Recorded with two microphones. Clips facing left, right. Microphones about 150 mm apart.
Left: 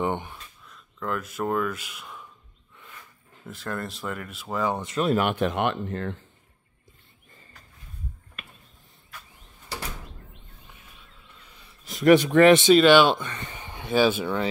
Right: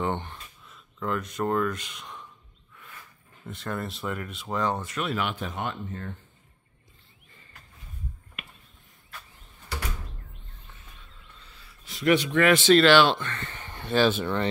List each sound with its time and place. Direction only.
0.0 s a sound: 10° left (ahead or behind)
0.7 s speech: centre (ahead or behind)
3.4 s speech: centre (ahead or behind)
4.9 s speech: 40° left (ahead or behind)
5.3 s speech: 70° left (ahead or behind)
11.3 s a sound: 15° left (ahead or behind)
11.8 s a man's voice: 45° left (ahead or behind)
12.4 s speech: 20° left (ahead or behind)